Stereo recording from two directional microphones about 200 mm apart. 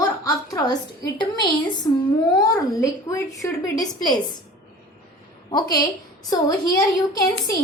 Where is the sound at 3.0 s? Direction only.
15° left (ahead or behind).